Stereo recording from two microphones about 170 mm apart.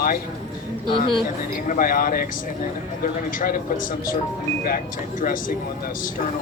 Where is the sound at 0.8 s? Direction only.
30° left (ahead or behind).